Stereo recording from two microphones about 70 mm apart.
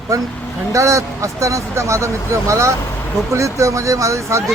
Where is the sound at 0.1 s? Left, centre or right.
Right.